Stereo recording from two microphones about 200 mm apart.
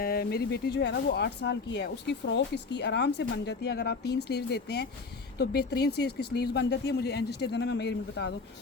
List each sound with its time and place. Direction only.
0.0 s speech: 50° left (ahead or behind)